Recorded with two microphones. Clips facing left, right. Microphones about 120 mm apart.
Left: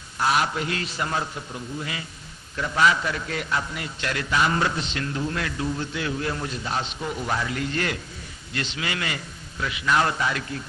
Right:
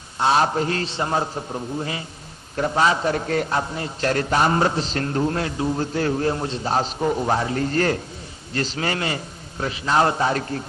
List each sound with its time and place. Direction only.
0.2 s a man's voice: 30° right (ahead or behind)
5.4 s a man's voice: 30° right (ahead or behind)